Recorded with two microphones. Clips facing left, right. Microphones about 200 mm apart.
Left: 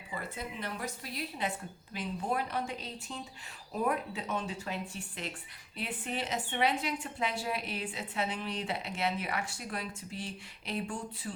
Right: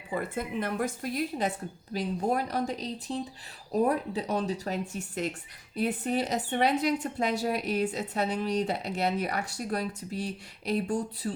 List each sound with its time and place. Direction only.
0.1 s speech: 50° right (ahead or behind)